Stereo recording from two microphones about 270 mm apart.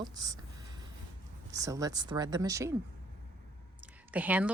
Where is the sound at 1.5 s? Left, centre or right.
Centre.